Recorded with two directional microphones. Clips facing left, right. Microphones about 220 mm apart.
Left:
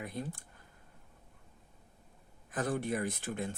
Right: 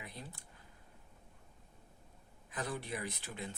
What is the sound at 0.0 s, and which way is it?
Speech, 50° left (ahead or behind).